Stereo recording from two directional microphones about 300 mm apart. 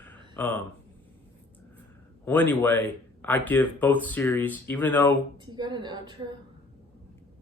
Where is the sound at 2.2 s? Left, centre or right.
Centre.